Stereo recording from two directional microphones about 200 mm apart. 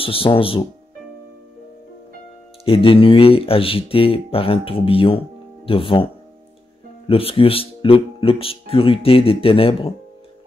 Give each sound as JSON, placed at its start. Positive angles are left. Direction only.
{"t": 0.0, "sound": "speech", "side_deg": 25}
{"t": 2.6, "sound": "speech", "side_deg": 25}
{"t": 7.1, "sound": "speech", "side_deg": 30}